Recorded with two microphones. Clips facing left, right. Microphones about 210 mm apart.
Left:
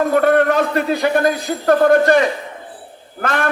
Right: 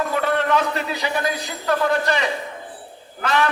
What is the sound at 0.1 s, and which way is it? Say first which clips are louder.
A man's voice: left 7 dB; 50° left (ahead or behind).